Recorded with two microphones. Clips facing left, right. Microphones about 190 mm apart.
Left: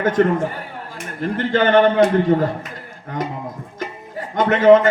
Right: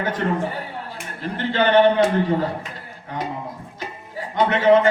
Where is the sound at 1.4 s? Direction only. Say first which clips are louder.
Left 2 dB; 45° left (ahead or behind).